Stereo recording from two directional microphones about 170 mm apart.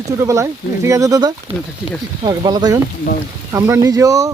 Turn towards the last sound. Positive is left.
turn(degrees=-20)  # may be behind; listen again after turning